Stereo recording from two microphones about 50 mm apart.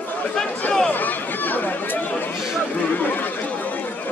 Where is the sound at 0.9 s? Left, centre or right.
Left.